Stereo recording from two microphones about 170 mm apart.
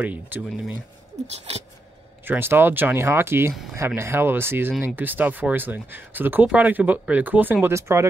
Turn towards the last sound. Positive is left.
turn(degrees=-15)  # may be behind; listen again after turning